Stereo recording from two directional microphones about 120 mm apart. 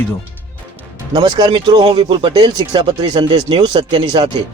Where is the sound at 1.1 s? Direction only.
35° right (ahead or behind).